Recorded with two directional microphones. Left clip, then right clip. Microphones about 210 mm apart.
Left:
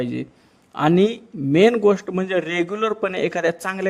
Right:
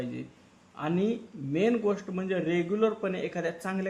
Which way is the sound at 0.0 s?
50° left (ahead or behind).